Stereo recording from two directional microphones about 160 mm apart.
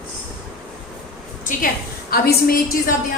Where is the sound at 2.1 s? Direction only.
70° left (ahead or behind).